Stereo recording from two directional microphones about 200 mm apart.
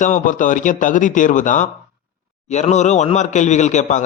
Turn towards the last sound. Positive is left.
turn(degrees=35)  # may be behind; listen again after turning